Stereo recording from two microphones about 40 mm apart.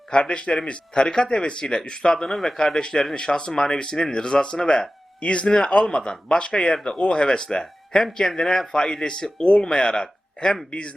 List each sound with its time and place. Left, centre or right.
0.1 s speech: left